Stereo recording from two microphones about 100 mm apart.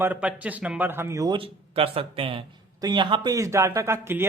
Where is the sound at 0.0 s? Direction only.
15° right (ahead or behind).